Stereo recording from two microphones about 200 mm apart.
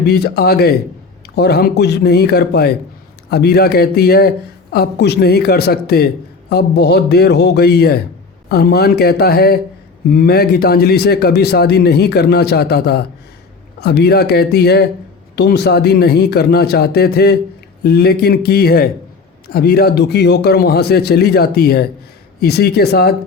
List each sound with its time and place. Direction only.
0.0 s speech: 55° left (ahead or behind)